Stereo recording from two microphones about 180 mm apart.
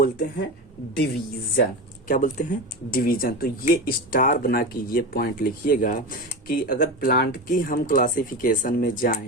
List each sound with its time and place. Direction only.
0.0 s speech: 55° left (ahead or behind)
2.0 s speech: 45° left (ahead or behind)